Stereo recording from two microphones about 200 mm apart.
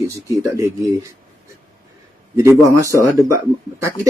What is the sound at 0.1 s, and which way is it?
Speech, 15° right (ahead or behind).